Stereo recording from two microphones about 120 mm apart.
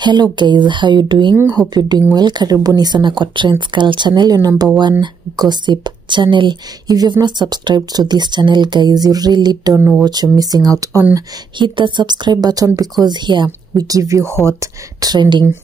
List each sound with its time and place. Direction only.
0.0 s speech: 40° right (ahead or behind)
11.1 s speech: 40° right (ahead or behind)